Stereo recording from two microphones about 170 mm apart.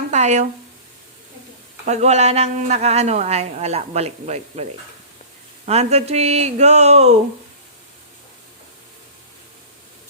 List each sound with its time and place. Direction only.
0.1 s a sound: 45° right (ahead or behind)
1.9 s a woman's voice: 40° right (ahead or behind)
5.6 s a woman's voice: 40° right (ahead or behind)